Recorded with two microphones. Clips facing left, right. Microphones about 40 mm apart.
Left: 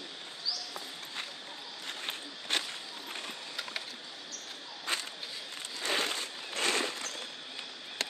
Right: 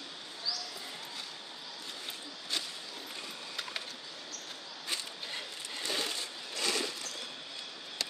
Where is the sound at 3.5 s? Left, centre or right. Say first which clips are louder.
Even; centre.